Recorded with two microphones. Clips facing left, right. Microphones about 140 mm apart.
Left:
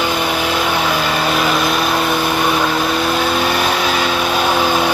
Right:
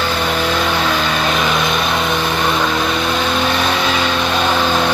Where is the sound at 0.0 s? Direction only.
10° left (ahead or behind).